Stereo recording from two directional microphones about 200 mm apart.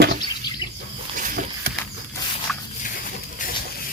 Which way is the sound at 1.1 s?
45° right (ahead or behind).